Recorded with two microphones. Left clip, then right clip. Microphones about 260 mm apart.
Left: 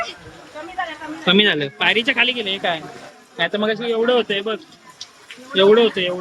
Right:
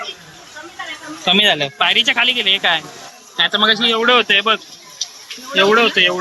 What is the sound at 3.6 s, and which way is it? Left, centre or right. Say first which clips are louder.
Speech: right 6 dB; centre.